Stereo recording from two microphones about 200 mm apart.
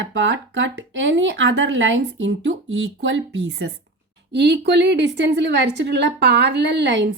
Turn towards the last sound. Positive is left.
turn(degrees=-60)  # may be behind; listen again after turning